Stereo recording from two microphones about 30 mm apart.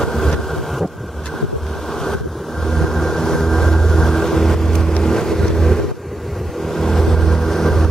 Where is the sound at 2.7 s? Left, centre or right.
Centre.